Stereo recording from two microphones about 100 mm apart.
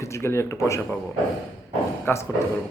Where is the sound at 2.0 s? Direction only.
25° left (ahead or behind).